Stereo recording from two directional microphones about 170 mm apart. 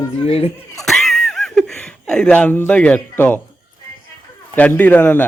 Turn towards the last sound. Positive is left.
turn(degrees=10)  # may be behind; listen again after turning